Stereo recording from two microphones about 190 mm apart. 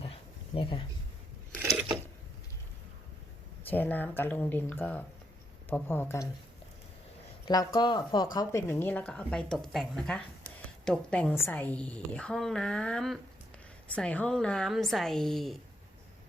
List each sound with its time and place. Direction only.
0.0 s a sound: 30° left (ahead or behind)
3.7 s a woman's voice: 10° left (ahead or behind)
7.4 s a woman's voice: 20° left (ahead or behind); by 15.5 s centre (ahead or behind)